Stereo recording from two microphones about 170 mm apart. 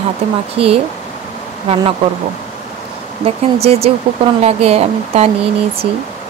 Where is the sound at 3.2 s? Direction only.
35° right (ahead or behind).